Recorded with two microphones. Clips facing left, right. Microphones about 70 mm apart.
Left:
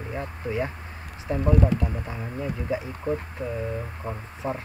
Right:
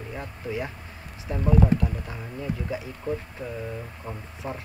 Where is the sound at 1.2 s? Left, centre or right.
Left.